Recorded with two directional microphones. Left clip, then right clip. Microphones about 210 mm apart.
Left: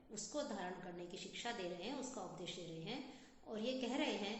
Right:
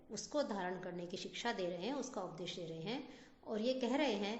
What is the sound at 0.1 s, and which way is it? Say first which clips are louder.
A woman's voice: right 6 dB; 50° right (ahead or behind).